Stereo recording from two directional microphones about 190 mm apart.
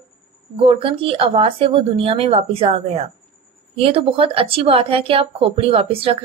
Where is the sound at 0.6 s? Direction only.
30° right (ahead or behind).